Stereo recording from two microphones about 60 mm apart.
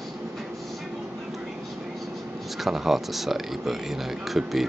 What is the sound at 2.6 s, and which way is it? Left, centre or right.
Speech, centre.